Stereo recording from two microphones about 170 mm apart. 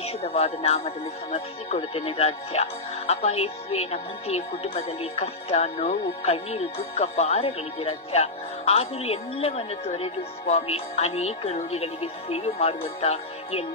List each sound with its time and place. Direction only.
0.0 s speech: 35° left (ahead or behind)
13.0 s music: 35° left (ahead or behind)